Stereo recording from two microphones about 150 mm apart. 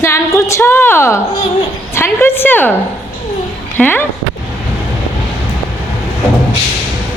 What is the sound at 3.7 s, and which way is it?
Speech, 15° left (ahead or behind).